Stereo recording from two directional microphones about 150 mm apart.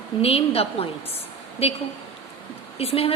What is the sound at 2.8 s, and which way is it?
Speech, 40° left (ahead or behind).